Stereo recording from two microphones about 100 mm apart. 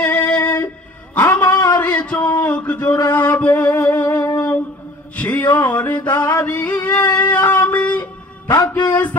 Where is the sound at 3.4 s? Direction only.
15° left (ahead or behind).